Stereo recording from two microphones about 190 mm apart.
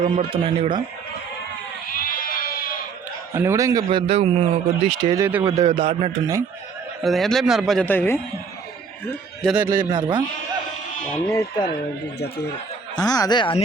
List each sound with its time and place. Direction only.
0.0 s speech: 30° right (ahead or behind)
1.9 s sheep: 50° left (ahead or behind)
3.3 s a man's voice: 15° right (ahead or behind)
3.8 s speech: 30° right (ahead or behind)
5.0 s a man's voice: 15° right (ahead or behind)
5.5 s speech: 25° right (ahead or behind)
7.0 s speech: centre (ahead or behind)
9.4 s speech: 5° right (ahead or behind)
9.9 s speech: 25° right (ahead or behind)
11.1 s speech: 20° left (ahead or behind)
13.0 s speech: 20° left (ahead or behind)